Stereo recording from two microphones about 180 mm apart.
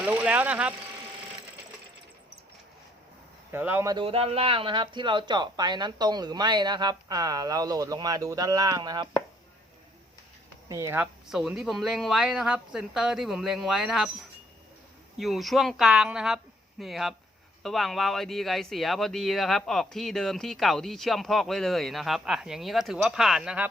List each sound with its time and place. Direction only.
0.0 s vehicle: 5° right (ahead or behind)
3.5 s speech: 10° right (ahead or behind)
3.9 s speech: 30° right (ahead or behind)
10.7 s speech: 15° right (ahead or behind)
15.2 s speech: centre (ahead or behind)